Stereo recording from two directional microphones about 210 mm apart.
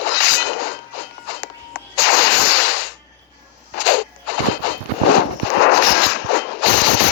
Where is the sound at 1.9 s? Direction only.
65° left (ahead or behind).